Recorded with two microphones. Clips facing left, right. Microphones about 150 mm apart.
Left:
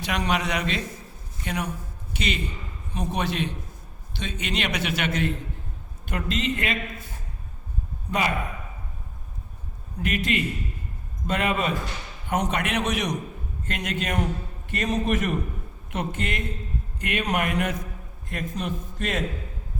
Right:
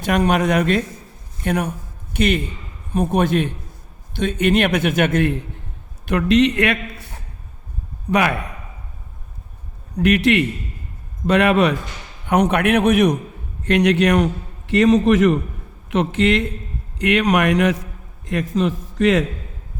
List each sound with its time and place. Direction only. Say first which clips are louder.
0.0 s a man's voice: right 9 dB; 50° right (ahead or behind)
6.1 s a man's voice: right 12 dB; 75° right (ahead or behind)
10.0 s speech: right 10 dB; 80° right
12.3 s a man's voice: right 10 dB; 65° right (ahead or behind)
13.7 s a man's voice: right 14 dB; 75° right (ahead or behind)
14.7 s a man's voice: right 11 dB; 90° right